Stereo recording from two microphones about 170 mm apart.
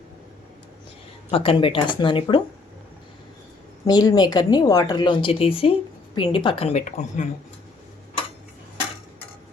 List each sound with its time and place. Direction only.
1.3 s speech: 30° left (ahead or behind)
3.8 s speech: 25° left (ahead or behind); by 7.3 s 45° left (ahead or behind)